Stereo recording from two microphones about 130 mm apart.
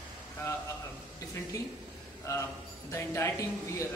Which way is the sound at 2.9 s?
20° left (ahead or behind).